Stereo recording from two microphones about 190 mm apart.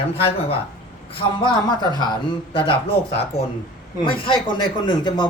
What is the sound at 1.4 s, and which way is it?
Speech, 20° left (ahead or behind).